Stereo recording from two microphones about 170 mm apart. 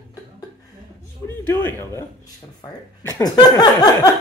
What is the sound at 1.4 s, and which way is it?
Speech, 15° left (ahead or behind).